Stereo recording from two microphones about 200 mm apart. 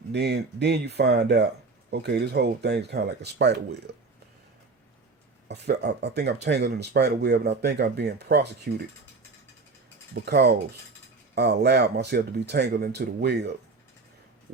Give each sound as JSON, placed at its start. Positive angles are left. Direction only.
{"t": 0.1, "sound": "speech", "side_deg": -55}
{"t": 5.5, "sound": "speech", "side_deg": -55}
{"t": 10.2, "sound": "speech", "side_deg": -55}